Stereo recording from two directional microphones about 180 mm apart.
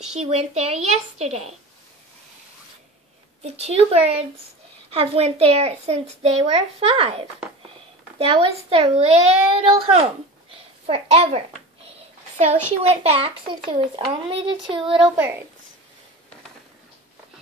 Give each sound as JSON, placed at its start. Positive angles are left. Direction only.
{"t": 0.1, "sound": "a child's voice", "side_deg": -35}
{"t": 3.4, "sound": "a child's voice", "side_deg": -35}
{"t": 8.3, "sound": "a child's voice", "side_deg": -30}
{"t": 15.0, "sound": "speech", "side_deg": -10}